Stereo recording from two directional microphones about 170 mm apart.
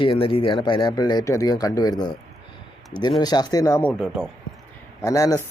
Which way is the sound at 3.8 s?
Centre (ahead or behind).